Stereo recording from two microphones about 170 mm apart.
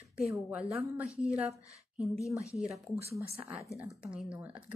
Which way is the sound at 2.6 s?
15° left (ahead or behind).